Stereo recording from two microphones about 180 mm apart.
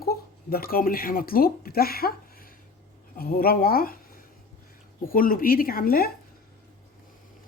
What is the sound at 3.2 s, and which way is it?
Speech, 55° left (ahead or behind).